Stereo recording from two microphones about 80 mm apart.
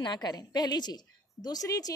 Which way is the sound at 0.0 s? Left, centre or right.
Left.